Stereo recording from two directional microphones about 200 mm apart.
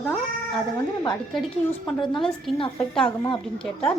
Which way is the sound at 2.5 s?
Centre (ahead or behind).